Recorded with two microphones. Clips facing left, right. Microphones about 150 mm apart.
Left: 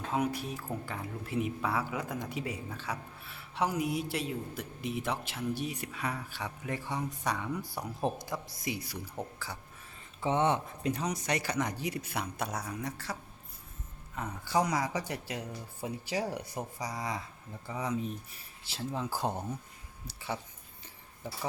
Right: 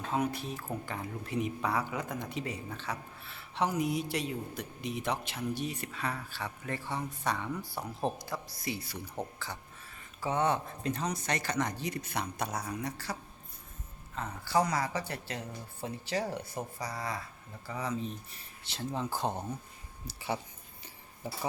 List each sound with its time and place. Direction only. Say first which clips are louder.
0.1 s a man's voice: even; 10° left (ahead or behind)
10.2 s a man's voice: left 1 dB; 20° left (ahead or behind); by 13.1 s centre (ahead or behind)
14.2 s a man's voice: right 1 dB; 15° left (ahead or behind)